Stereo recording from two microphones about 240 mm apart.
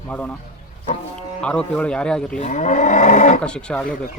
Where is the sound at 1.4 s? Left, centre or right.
Centre.